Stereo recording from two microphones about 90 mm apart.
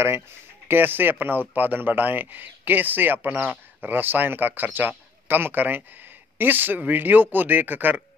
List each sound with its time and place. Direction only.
0.7 s a man's voice: 20° right (ahead or behind)